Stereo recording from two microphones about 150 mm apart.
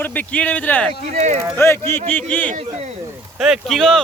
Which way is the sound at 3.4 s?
Centre (ahead or behind).